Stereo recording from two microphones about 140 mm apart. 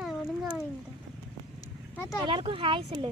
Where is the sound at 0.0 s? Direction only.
Centre (ahead or behind).